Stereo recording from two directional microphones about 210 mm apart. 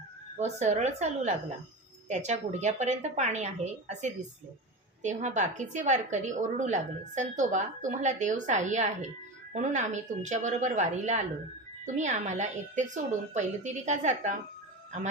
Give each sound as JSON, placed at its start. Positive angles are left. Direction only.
{"t": 0.3, "sound": "a woman's voice", "side_deg": -35}